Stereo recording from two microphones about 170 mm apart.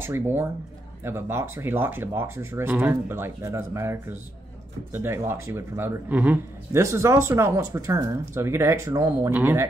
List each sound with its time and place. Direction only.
0.0 s speech: 15° right (ahead or behind)